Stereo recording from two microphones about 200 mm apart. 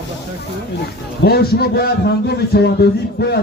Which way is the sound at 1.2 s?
50° left (ahead or behind).